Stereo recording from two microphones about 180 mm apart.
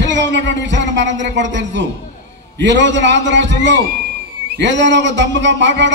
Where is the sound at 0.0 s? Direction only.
85° right.